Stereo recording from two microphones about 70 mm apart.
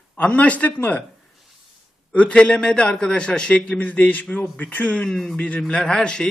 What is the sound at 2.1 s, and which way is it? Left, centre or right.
A man's voice, centre.